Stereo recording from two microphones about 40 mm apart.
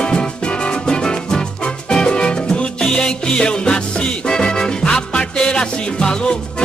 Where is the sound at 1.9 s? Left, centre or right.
Left.